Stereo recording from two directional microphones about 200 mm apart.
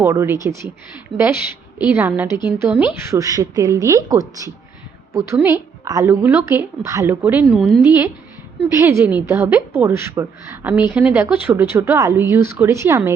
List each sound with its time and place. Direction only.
0.0 s a woman's voice: 15° right (ahead or behind)